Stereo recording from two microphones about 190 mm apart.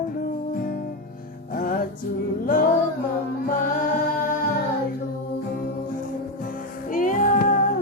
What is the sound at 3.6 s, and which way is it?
Music, 45° left (ahead or behind).